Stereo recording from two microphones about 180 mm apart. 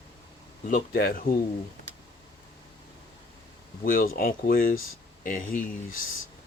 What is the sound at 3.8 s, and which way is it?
Speech, 50° left (ahead or behind).